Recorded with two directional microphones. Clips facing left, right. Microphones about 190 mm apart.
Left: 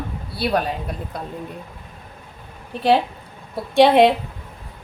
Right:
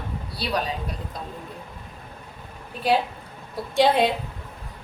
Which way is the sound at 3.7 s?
65° left (ahead or behind).